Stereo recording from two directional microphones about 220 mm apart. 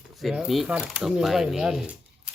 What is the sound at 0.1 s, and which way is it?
Speech, centre (ahead or behind).